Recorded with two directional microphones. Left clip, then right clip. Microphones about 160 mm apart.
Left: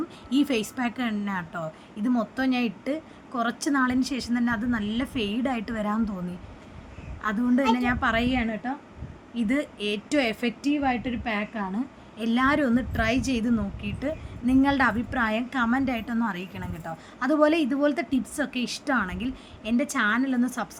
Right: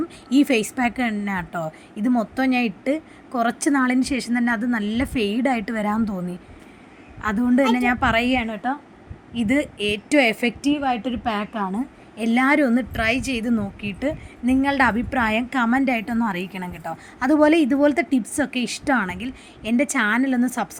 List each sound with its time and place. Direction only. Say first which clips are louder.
0.3 s a woman's voice: right 6 dB; 25° right (ahead or behind)
7.2 s a woman's voice: right 5 dB; 25° right (ahead or behind)